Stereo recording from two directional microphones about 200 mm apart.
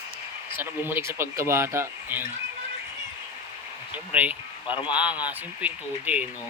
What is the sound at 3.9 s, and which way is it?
Speech, 5° right (ahead or behind).